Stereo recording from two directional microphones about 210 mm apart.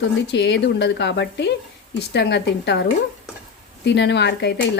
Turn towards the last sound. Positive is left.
turn(degrees=55)  # may be behind; listen again after turning